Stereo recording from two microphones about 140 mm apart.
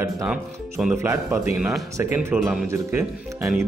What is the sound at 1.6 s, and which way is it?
Speech, centre (ahead or behind).